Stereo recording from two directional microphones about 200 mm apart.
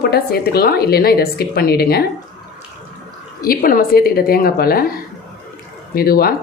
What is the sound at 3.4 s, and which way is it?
Speech, 45° left (ahead or behind).